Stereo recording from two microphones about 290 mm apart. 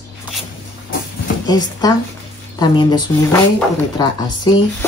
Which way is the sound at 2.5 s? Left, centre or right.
Centre.